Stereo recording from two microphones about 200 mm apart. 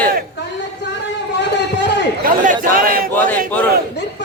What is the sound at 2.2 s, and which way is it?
Speech, 40° right (ahead or behind).